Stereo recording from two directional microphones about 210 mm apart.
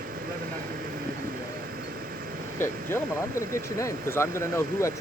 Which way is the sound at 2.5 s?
10° left (ahead or behind).